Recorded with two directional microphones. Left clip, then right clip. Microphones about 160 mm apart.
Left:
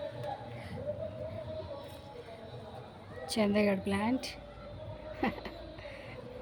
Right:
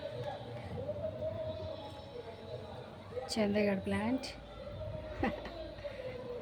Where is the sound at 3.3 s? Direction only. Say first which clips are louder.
Left 3 dB; 25° left (ahead or behind).